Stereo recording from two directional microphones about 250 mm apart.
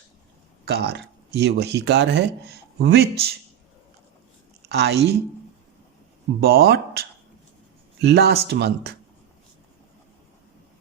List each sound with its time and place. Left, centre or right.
0.6 s speech: right
4.7 s speech: right
6.4 s speech: right
8.0 s speech: right